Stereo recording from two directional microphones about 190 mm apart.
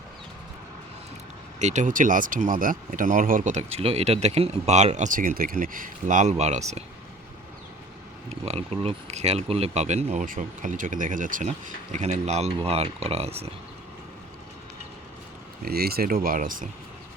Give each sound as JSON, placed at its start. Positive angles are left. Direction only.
{"t": 1.5, "sound": "speech", "side_deg": -40}
{"t": 8.3, "sound": "speech", "side_deg": -35}
{"t": 15.6, "sound": "speech", "side_deg": -55}